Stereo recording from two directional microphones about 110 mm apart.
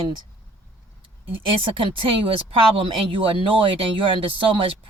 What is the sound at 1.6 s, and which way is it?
Speech, 50° right (ahead or behind).